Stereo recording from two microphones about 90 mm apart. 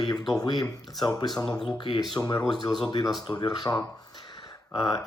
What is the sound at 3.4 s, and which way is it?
Throat clearing, 50° left (ahead or behind).